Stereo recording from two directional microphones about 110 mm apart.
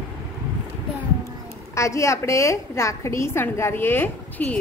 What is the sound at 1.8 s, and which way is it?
A woman's voice, 25° left (ahead or behind).